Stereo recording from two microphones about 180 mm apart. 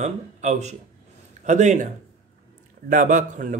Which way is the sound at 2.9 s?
50° right (ahead or behind).